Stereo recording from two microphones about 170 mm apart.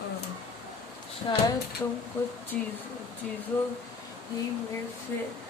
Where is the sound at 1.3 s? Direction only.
30° left (ahead or behind).